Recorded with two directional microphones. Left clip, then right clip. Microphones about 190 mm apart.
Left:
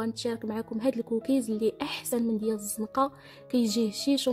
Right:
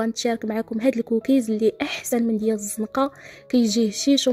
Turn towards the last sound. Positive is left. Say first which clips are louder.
# right 7 dB
turn(degrees=-15)  # may be behind; listen again after turning